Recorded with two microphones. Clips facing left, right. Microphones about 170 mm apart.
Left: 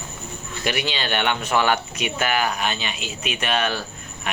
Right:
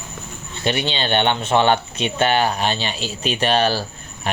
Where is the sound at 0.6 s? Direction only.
30° right (ahead or behind).